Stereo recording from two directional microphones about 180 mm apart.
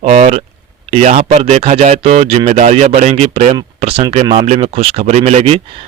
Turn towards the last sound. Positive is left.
turn(degrees=-35)  # may be behind; listen again after turning